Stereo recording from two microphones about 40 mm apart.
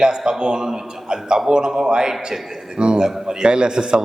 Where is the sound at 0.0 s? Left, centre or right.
Centre.